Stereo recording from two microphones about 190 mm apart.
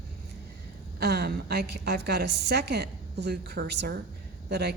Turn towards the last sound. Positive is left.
turn(degrees=-60)  # may be behind; listen again after turning